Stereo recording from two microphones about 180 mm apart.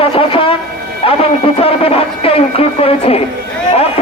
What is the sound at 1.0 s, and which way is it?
Music, 30° left (ahead or behind).